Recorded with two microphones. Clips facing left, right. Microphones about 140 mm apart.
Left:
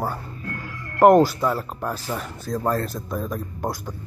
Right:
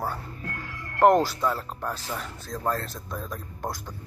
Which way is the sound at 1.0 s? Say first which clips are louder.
Left 5 dB; 5° left (ahead or behind).